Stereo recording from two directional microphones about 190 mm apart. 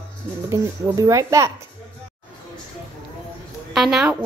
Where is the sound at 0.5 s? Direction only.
15° right (ahead or behind).